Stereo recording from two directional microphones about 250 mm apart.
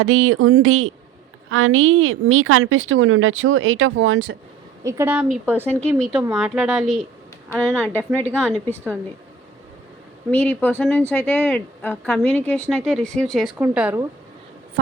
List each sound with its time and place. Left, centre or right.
0.0 s a woman's voice: right
4.8 s speech: centre
5.5 s a woman's voice: centre
7.9 s a woman's voice: centre
10.3 s speech: centre